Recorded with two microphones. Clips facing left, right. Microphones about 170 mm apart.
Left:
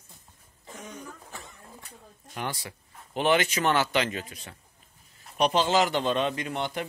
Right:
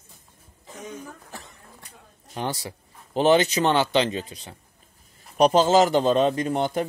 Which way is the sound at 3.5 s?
25° right (ahead or behind).